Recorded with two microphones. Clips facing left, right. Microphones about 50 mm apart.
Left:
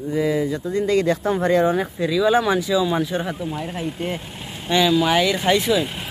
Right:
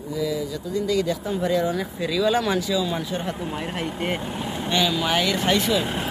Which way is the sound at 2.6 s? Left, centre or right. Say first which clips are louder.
Left 4 dB; left.